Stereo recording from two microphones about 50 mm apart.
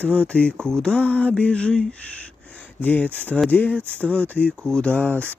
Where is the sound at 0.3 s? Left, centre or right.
Left.